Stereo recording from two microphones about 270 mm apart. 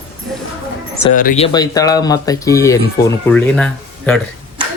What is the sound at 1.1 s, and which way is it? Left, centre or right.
Speech, left.